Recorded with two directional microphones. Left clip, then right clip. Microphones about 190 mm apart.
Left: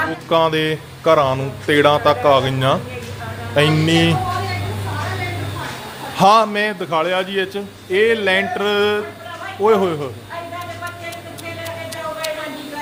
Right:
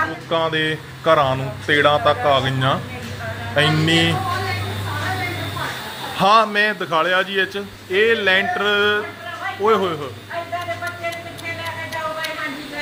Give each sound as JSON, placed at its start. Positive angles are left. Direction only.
{"t": 0.3, "sound": "a man's voice", "side_deg": 25}
{"t": 6.1, "sound": "a man's voice", "side_deg": 25}